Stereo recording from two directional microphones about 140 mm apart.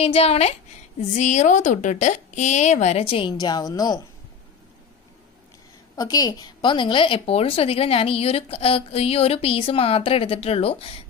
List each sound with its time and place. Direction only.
0.0 s a woman's voice: 45° left (ahead or behind); by 4.0 s 30° left (ahead or behind)
5.9 s a woman's voice: 30° left (ahead or behind); by 11.0 s 45° left (ahead or behind)